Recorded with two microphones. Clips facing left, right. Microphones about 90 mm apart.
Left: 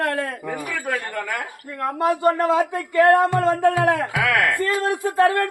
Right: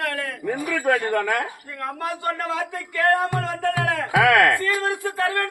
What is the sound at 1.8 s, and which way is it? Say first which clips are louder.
Speech: left 8 dB; 20° left (ahead or behind).